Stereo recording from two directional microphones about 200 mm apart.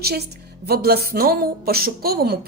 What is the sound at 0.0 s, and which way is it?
A woman's voice, 55° right (ahead or behind).